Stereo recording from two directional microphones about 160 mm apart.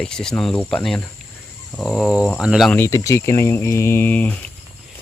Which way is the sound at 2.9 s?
20° left (ahead or behind).